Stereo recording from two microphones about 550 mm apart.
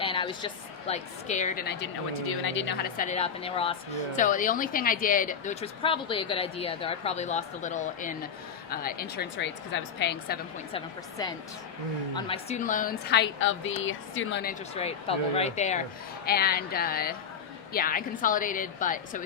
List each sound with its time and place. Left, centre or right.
0.0 s a woman's voice: centre